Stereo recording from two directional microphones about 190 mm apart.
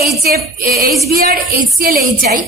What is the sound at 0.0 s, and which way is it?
Female singing, 55° right (ahead or behind).